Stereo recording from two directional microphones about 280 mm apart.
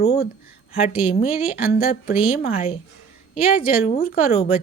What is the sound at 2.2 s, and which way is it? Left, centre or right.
A woman's voice, left.